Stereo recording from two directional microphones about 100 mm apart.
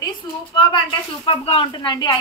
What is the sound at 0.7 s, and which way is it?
Speech, 60° left (ahead or behind).